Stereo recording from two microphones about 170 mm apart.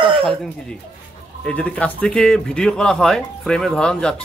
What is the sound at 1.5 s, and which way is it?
Speech, 5° left (ahead or behind).